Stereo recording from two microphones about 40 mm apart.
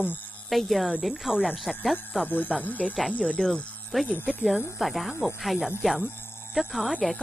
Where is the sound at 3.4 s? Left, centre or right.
Left.